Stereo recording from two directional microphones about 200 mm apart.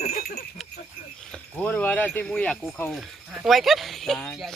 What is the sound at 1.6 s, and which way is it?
Speech, 10° left (ahead or behind).